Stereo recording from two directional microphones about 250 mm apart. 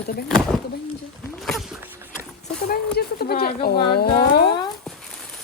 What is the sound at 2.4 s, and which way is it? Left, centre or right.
Speech, left.